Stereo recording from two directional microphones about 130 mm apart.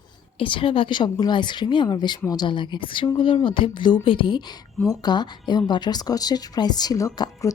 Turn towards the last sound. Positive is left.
turn(degrees=25)  # may be behind; listen again after turning